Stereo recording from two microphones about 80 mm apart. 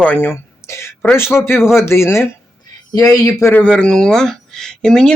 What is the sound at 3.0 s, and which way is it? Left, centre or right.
Speech, left.